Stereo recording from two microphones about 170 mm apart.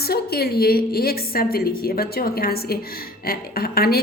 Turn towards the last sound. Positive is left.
turn(degrees=65)  # may be behind; listen again after turning